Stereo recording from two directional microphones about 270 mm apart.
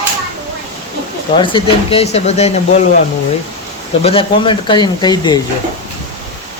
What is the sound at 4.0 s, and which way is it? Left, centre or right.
Speech, left.